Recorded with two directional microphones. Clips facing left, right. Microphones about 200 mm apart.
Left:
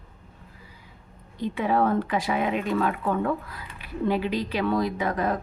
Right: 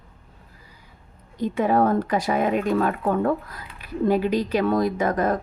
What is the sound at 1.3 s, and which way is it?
Speech, 45° right (ahead or behind).